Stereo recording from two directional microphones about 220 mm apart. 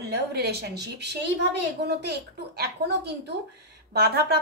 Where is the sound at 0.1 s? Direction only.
45° right (ahead or behind).